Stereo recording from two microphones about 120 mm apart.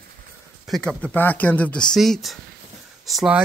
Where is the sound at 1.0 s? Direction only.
15° left (ahead or behind).